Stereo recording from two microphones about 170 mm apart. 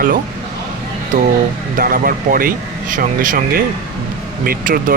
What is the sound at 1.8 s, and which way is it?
Speech, 55° right (ahead or behind).